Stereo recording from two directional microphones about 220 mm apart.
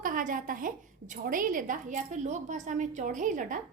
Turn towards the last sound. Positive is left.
turn(degrees=-35)  # may be behind; listen again after turning